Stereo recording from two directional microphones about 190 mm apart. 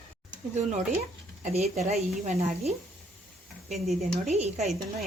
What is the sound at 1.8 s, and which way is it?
Speech, 35° right (ahead or behind).